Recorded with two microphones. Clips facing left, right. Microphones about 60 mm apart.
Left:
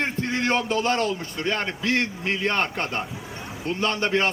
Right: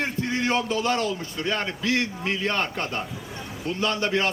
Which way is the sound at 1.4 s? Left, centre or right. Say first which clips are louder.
Left 1 dB; left.